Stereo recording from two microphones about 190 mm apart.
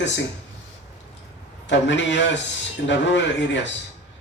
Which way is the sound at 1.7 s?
70° left (ahead or behind).